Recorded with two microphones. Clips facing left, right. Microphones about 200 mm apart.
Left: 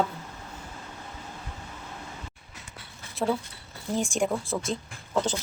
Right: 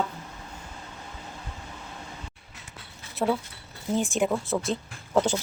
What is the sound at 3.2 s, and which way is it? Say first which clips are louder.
Speech: right 1 dB; centre (ahead or behind).